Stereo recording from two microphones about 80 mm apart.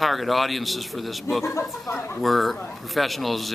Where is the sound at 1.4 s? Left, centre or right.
Left.